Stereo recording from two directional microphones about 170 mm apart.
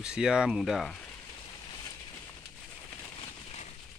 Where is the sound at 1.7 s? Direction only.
20° left (ahead or behind).